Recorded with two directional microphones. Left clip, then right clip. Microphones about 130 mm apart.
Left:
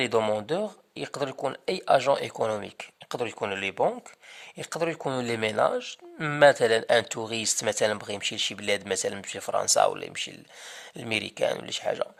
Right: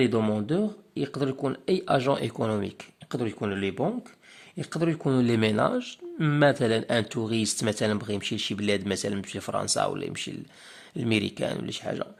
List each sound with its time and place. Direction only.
0.0 s speech: 25° left (ahead or behind)